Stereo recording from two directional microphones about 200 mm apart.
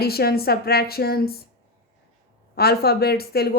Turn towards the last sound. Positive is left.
turn(degrees=50)  # may be behind; listen again after turning